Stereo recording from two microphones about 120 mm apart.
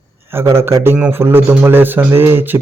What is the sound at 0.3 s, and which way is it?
Speech, 20° right (ahead or behind).